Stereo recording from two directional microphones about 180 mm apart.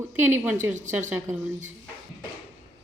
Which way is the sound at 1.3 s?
45° right (ahead or behind).